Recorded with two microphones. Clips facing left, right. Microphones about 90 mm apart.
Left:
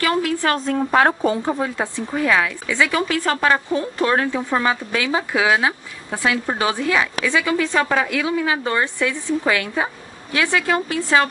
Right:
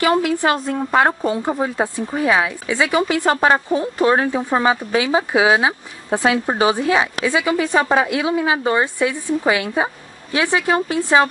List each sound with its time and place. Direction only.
0.0 s a woman's voice: 20° right (ahead or behind)
1.6 s a woman's voice: 20° right (ahead or behind)